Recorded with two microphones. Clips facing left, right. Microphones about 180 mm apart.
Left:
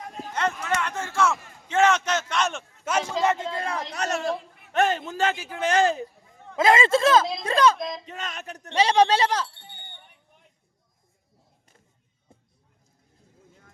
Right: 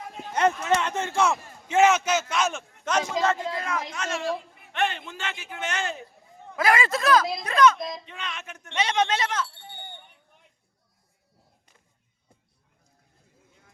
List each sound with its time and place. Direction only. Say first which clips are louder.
0.8 s a man's voice: right 1 dB; 20° right (ahead or behind); by 3.0 s 5° left (ahead or behind)
3.2 s speech: left 2 dB; 15° left (ahead or behind)
3.5 s a man's voice: left 1 dB; 30° left (ahead or behind)
6.6 s a man's voice: left 4 dB; 25° left (ahead or behind)
7.8 s speech: left 2 dB; centre (ahead or behind)
8.0 s a man's voice: left 2 dB; 40° left (ahead or behind)
12.3 s music: left 5 dB; 25° left (ahead or behind)